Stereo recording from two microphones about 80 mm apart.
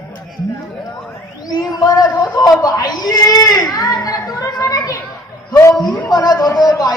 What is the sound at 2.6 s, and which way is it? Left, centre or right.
Speech, left.